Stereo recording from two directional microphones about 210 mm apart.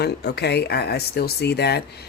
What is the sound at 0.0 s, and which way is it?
Speech, 50° left (ahead or behind).